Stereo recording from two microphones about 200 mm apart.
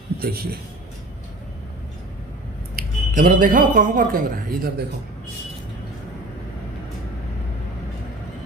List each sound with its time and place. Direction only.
0.2 s speech: 50° right (ahead or behind)
2.7 s speech: 40° right (ahead or behind)